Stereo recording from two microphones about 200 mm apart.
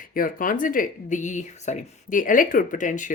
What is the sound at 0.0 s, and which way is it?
Speech, 45° left (ahead or behind).